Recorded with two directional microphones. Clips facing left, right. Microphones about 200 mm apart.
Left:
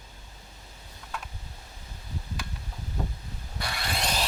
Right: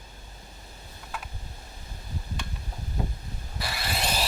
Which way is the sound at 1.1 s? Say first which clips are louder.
Even; 5° right (ahead or behind).